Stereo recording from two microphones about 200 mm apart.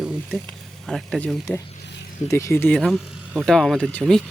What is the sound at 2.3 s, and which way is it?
Speech, 15° left (ahead or behind).